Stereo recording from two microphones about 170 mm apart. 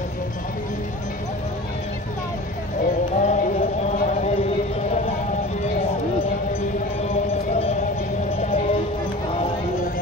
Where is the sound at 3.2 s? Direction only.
45° left (ahead or behind).